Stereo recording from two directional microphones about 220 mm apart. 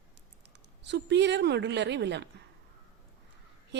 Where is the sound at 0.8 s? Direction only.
50° right (ahead or behind).